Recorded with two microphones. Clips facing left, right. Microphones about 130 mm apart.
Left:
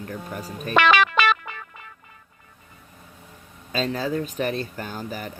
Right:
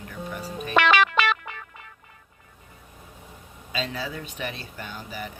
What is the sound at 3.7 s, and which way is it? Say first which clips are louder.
Speech: left 6 dB; 45° left (ahead or behind).